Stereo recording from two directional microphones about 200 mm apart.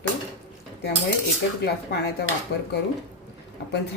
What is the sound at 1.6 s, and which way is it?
Speech, 55° left (ahead or behind).